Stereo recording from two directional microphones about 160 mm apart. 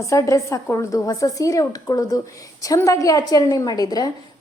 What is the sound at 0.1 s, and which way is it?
A woman's voice, 20° left (ahead or behind).